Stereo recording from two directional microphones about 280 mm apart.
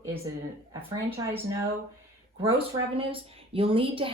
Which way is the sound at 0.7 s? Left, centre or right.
Centre.